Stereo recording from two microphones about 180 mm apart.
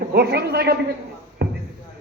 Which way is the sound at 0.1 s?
65° right (ahead or behind).